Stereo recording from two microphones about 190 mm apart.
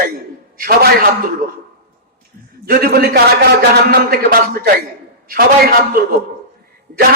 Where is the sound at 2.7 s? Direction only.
55° right (ahead or behind).